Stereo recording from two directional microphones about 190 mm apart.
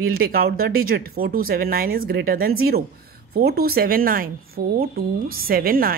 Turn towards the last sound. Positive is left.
turn(degrees=-50)  # may be behind; listen again after turning